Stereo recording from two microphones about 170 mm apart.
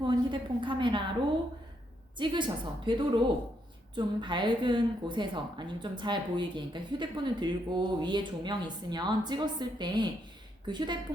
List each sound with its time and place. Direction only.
0.0 s a woman's voice: 30° right (ahead or behind)
2.1 s a woman's voice: 30° right (ahead or behind)